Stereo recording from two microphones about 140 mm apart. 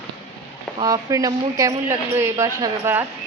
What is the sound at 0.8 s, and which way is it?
Speech, 25° right (ahead or behind).